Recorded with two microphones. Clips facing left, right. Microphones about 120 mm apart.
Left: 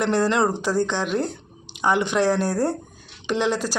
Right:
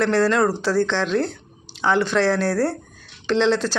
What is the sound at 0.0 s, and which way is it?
Speech, 15° left (ahead or behind).